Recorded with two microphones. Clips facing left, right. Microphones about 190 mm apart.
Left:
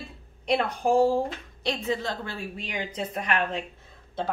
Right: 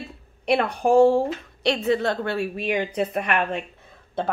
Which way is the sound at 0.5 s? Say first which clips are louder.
Right 4 dB; 65° right (ahead or behind).